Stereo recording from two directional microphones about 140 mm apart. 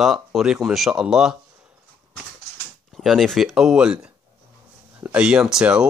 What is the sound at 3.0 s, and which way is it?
Speech, centre (ahead or behind).